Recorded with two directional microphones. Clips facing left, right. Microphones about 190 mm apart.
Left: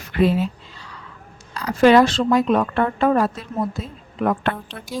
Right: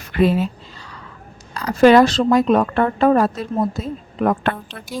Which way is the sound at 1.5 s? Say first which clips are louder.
Right 2 dB; 45° right (ahead or behind).